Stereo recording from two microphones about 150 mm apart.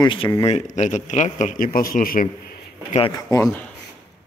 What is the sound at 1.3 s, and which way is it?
A man's voice, 60° left (ahead or behind).